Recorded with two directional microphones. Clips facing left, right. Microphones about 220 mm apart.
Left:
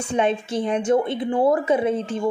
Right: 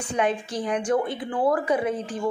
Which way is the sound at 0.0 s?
25° left (ahead or behind).